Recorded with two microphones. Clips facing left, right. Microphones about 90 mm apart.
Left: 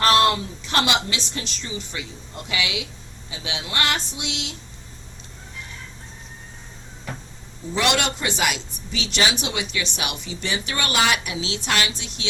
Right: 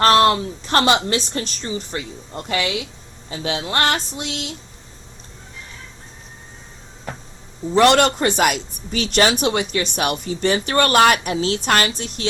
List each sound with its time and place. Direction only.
0.0 s a man's voice: 40° right (ahead or behind)
7.7 s speech: 45° right (ahead or behind)